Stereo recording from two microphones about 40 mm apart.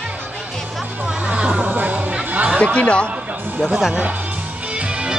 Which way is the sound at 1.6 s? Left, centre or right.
Right.